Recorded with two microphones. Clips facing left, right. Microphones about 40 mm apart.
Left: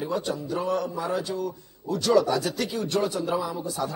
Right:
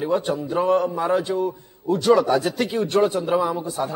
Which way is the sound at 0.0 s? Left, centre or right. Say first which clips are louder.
Right 6 dB; right.